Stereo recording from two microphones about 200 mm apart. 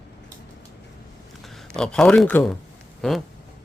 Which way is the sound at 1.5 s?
Centre (ahead or behind).